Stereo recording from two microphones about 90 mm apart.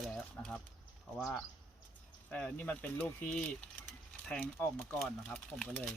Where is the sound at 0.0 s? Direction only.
5° left (ahead or behind).